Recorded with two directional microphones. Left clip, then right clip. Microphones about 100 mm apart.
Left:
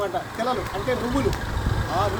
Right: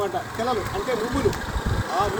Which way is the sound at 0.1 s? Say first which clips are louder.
Even; 50° right (ahead or behind).